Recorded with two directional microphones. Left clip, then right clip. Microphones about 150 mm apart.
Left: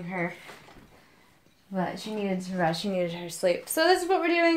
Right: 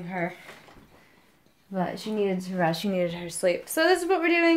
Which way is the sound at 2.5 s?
45° right (ahead or behind).